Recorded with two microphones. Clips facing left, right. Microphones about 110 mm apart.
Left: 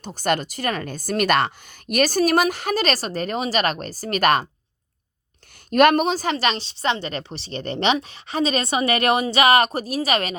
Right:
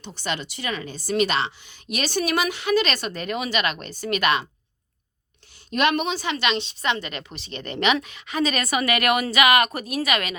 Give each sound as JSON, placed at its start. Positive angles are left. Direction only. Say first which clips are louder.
{"t": 0.0, "sound": "a woman's voice", "louder": "left 7 dB", "side_deg": 45}
{"t": 5.7, "sound": "a woman's voice", "louder": "left 6 dB", "side_deg": 45}